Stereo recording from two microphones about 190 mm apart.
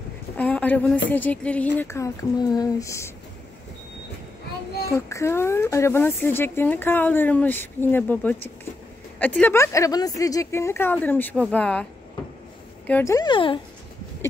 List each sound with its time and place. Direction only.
0.4 s a sound: 10° left (ahead or behind)
1.1 s speech: 10° left (ahead or behind)
4.9 s speech: 15° left (ahead or behind)
12.8 s speech: 10° left (ahead or behind)